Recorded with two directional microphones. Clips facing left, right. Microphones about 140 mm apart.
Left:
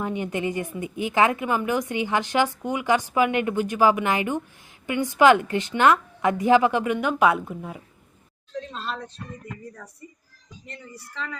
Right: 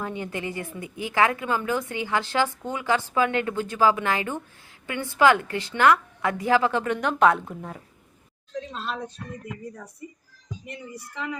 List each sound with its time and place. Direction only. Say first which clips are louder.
0.0 s a woman's voice: left 4 dB; 20° left (ahead or behind); by 11.3 s 15° right (ahead or behind)